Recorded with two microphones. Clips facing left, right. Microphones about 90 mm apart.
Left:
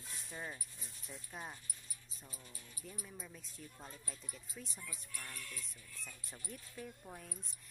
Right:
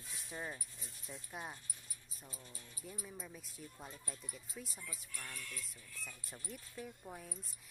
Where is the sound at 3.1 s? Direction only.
5° right (ahead or behind).